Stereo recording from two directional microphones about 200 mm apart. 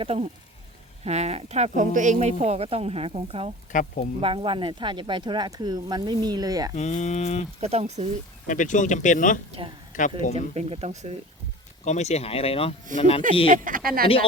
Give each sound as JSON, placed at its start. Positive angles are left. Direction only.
{"t": 0.0, "sound": "speech", "side_deg": -30}
{"t": 3.7, "sound": "speech", "side_deg": 40}
{"t": 4.2, "sound": "speech", "side_deg": -25}
{"t": 6.7, "sound": "speech", "side_deg": 35}
{"t": 7.6, "sound": "speech", "side_deg": -35}
{"t": 8.4, "sound": "speech", "side_deg": 40}
{"t": 9.5, "sound": "speech", "side_deg": -25}
{"t": 9.9, "sound": "speech", "side_deg": 40}
{"t": 10.3, "sound": "speech", "side_deg": -30}
{"t": 11.9, "sound": "speech", "side_deg": 35}
{"t": 13.5, "sound": "speech", "side_deg": -45}